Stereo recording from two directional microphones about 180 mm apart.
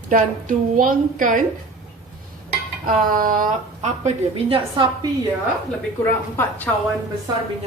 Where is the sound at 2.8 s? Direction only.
50° right (ahead or behind); by 5.1 s 25° right (ahead or behind).